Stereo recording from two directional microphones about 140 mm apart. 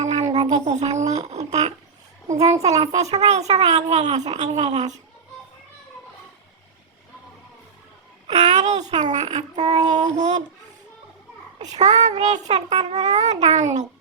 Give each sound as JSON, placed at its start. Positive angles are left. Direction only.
{"t": 0.0, "sound": "a sound", "side_deg": -55}
{"t": 0.5, "sound": "speech", "side_deg": -55}
{"t": 8.3, "sound": "speech", "side_deg": -55}
{"t": 9.6, "sound": "child singing", "side_deg": -30}
{"t": 9.9, "sound": "child singing", "side_deg": -60}
{"t": 11.6, "sound": "child singing", "side_deg": -55}
{"t": 12.2, "sound": "speech", "side_deg": -55}